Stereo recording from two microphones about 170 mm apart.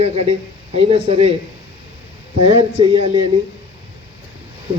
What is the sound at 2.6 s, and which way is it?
Speech, 35° right (ahead or behind).